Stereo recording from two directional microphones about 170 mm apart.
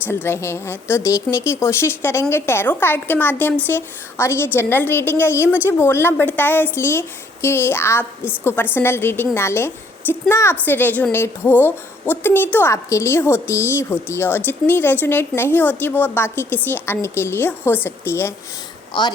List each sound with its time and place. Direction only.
0.0 s a woman's voice: 15° left (ahead or behind)
5.4 s speech: 10° right (ahead or behind)
5.6 s a woman's voice: 15° left (ahead or behind)
18.9 s a woman's voice: 25° left (ahead or behind)